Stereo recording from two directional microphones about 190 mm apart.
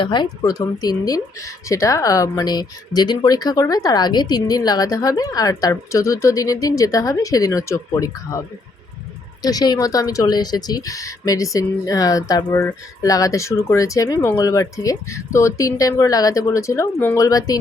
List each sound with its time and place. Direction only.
0.0 s speech: 25° left (ahead or behind)
9.4 s speech: 20° left (ahead or behind)